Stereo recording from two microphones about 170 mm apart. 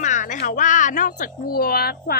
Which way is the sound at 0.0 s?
45° left (ahead or behind).